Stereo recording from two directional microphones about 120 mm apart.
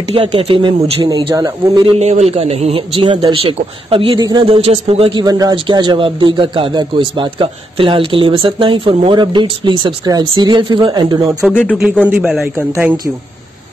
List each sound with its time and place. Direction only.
0.1 s a man's voice: 50° right (ahead or behind)
1.0 s speech: 35° right (ahead or behind)
2.0 s a man's voice: 65° right (ahead or behind); by 4.2 s 50° right (ahead or behind)
4.2 s speech: 35° right (ahead or behind)
4.5 s a man's voice: 55° right (ahead or behind)
5.1 s a man's voice: 30° right (ahead or behind)
11.7 s a man's voice: 5° right (ahead or behind)
12.5 s speech: 15° right (ahead or behind)